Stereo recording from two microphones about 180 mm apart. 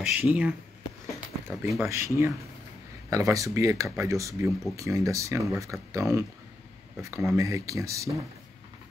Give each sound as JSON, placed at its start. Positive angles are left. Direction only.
{"t": 0.0, "sound": "speech", "side_deg": -5}
{"t": 1.7, "sound": "speech", "side_deg": -15}